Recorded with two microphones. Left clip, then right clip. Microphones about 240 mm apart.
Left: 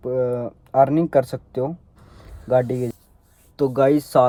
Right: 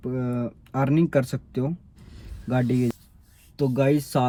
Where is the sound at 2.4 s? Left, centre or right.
Left.